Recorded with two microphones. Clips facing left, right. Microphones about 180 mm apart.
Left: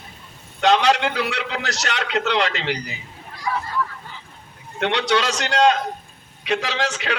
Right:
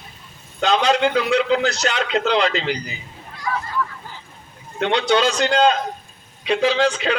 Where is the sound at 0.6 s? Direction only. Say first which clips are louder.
Even; 70° left (ahead or behind).